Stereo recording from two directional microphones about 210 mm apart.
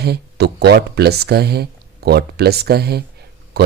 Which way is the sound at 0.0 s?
50° right (ahead or behind).